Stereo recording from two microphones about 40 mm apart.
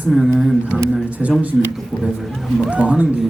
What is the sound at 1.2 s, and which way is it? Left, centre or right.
Speech, right.